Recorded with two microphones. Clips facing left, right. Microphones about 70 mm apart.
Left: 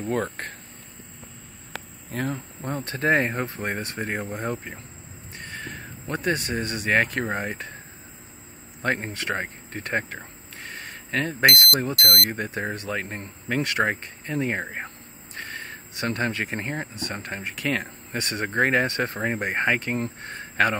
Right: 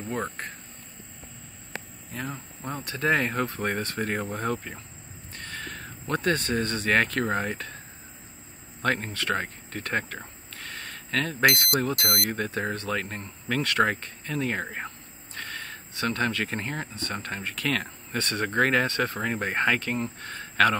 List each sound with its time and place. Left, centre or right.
2.1 s speech: left
2.7 s speech: left
8.8 s speech: left
11.9 s speech: centre
12.3 s speech: left